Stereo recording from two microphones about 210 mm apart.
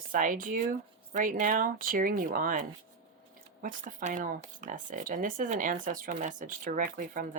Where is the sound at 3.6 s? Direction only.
40° right (ahead or behind).